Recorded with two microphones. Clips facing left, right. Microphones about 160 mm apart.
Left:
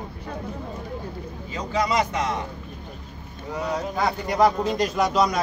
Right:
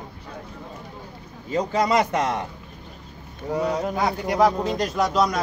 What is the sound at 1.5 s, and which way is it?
Speech, 50° right (ahead or behind).